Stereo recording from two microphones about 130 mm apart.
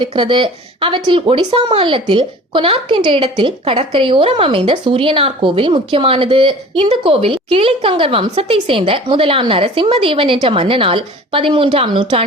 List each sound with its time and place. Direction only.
0.0 s speech: 40° right (ahead or behind)